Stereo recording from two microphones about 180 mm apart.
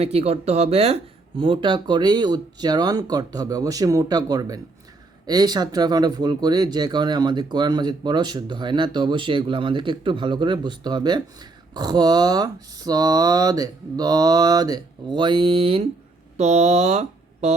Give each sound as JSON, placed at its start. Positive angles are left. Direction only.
{"t": 0.0, "sound": "speech", "side_deg": -35}